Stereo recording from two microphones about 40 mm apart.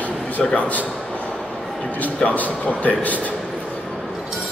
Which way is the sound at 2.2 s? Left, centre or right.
Left.